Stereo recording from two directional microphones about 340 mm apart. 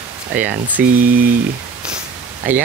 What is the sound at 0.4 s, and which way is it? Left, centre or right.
Speech, centre.